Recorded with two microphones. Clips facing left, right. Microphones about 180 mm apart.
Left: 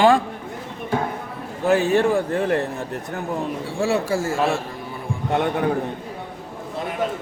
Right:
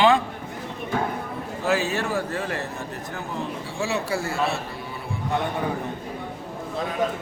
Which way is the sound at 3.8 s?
55° left (ahead or behind).